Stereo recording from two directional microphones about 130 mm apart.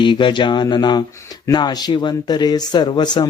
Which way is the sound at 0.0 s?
40° left (ahead or behind).